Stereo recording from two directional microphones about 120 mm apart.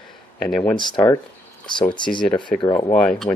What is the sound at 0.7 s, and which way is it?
Speech, 35° left (ahead or behind).